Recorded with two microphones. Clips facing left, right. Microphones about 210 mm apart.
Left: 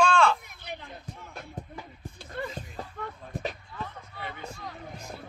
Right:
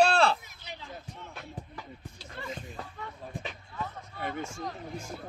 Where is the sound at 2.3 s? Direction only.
55° left (ahead or behind).